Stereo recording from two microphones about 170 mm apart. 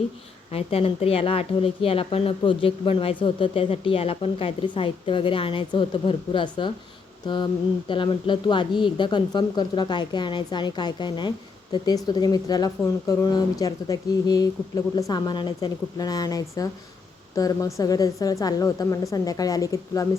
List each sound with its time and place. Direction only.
0.5 s a woman's voice: 35° left (ahead or behind); by 20.1 s 20° left (ahead or behind)